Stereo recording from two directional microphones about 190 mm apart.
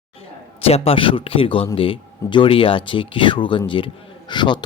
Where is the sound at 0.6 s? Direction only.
30° left (ahead or behind).